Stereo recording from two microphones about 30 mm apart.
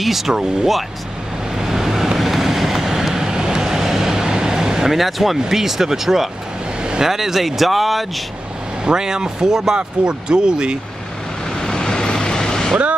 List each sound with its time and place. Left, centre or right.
0.0 s speech: centre
1.6 s vehicle: centre
4.9 s speech: centre
8.8 s speech: right
11.4 s vehicle: left